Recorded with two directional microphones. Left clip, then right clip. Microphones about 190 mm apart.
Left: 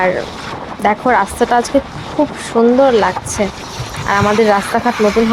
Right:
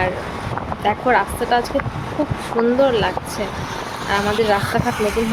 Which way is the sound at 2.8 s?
25° left (ahead or behind).